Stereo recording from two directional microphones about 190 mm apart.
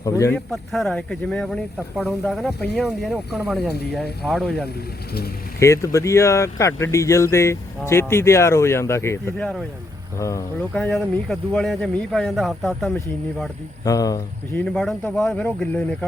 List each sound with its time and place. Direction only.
0.0 s speech: 15° left (ahead or behind)
0.3 s speech: centre (ahead or behind)
5.5 s speech: 15° left (ahead or behind)
13.8 s speech: 20° left (ahead or behind)
14.6 s speech: 5° left (ahead or behind)